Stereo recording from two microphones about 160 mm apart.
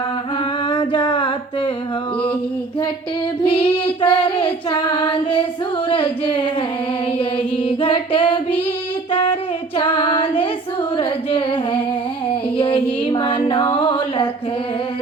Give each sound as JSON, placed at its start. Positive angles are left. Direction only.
{"t": 0.7, "sound": "music", "side_deg": 30}
{"t": 3.4, "sound": "child singing", "side_deg": 35}
{"t": 7.2, "sound": "music", "side_deg": 35}
{"t": 9.1, "sound": "female singing", "side_deg": 35}
{"t": 10.9, "sound": "carnatic music", "side_deg": 35}
{"t": 12.3, "sound": "a sound", "side_deg": 35}